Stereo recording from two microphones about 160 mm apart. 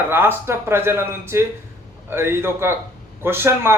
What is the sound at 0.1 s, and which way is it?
A man's voice, 15° right (ahead or behind).